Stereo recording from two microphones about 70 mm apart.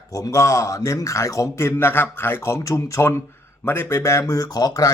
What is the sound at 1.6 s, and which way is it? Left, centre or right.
Speech, left.